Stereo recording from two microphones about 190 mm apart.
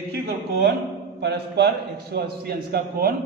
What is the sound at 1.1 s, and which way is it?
A man's voice, 60° right (ahead or behind).